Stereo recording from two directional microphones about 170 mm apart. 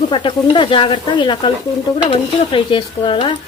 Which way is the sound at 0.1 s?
30° left (ahead or behind).